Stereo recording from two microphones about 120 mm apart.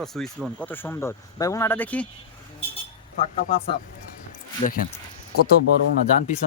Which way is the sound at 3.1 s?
50° left (ahead or behind).